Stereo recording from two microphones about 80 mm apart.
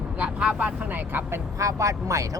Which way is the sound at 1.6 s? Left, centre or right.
Right.